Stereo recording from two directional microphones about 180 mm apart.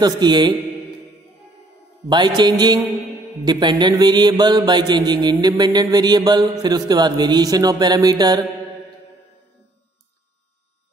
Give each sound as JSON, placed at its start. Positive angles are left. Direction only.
{"t": 0.0, "sound": "mantra", "side_deg": -25}
{"t": 2.0, "sound": "mantra", "side_deg": -25}